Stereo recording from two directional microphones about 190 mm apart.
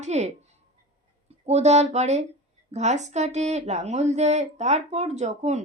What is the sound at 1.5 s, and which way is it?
Speech, 35° right (ahead or behind).